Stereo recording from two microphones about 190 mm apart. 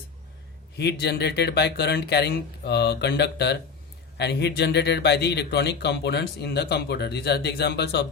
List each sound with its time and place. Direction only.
0.8 s speech: 60° left (ahead or behind)